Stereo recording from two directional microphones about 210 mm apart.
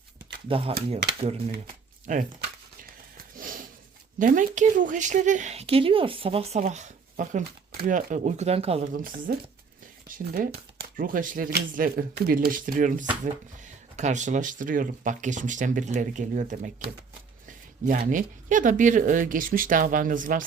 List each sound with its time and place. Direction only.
0.4 s speech: 25° right (ahead or behind)
2.1 s speech: 40° right (ahead or behind)
2.8 s wheeze: 45° right (ahead or behind)
4.2 s speech: 40° right (ahead or behind)